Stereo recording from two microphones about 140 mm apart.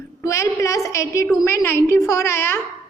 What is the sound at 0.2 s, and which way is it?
A woman's voice, 20° left (ahead or behind).